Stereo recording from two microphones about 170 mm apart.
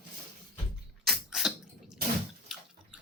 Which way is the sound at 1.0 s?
Centre (ahead or behind).